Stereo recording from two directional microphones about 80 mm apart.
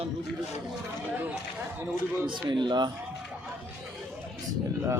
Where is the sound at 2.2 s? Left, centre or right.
Right.